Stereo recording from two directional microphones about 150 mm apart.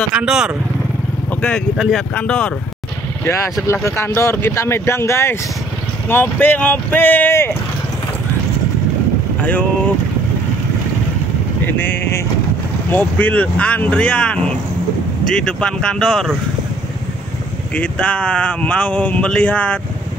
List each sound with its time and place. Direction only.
0.1 s speech: 5° right (ahead or behind)
1.8 s speech: centre (ahead or behind)
3.6 s speech: 15° left (ahead or behind)
9.4 s speech: 10° left (ahead or behind)
11.6 s speech: 10° left (ahead or behind)
17.7 s speech: 10° left (ahead or behind)